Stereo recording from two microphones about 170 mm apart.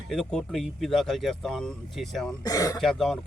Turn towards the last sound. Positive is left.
turn(degrees=0)  # may be behind; listen again after turning